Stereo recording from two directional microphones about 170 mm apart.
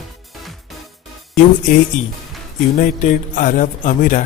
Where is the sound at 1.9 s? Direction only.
45° left (ahead or behind).